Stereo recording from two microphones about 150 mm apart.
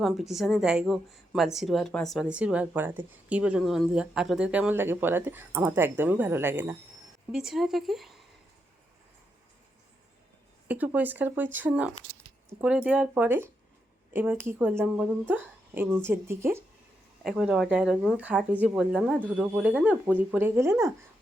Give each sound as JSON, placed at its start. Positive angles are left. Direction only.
{"t": 0.0, "sound": "a woman's voice", "side_deg": 0}
{"t": 7.3, "sound": "a woman's voice", "side_deg": 0}
{"t": 10.7, "sound": "a woman's voice", "side_deg": -10}
{"t": 17.2, "sound": "a woman's voice", "side_deg": -5}